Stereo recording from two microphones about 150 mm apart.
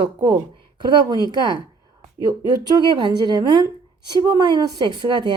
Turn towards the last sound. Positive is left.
turn(degrees=-30)  # may be behind; listen again after turning